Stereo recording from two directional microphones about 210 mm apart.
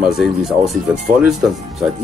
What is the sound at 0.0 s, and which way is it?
Speech, centre (ahead or behind).